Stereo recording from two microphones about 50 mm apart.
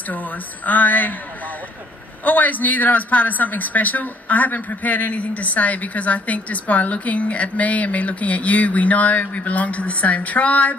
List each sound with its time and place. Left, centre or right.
0.1 s a man's voice: left
2.2 s a man's voice: left